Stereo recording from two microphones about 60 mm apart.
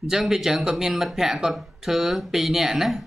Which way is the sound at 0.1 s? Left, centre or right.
Centre.